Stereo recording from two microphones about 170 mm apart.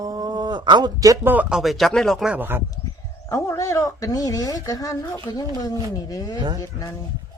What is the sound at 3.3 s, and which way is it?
Speech, 20° left (ahead or behind).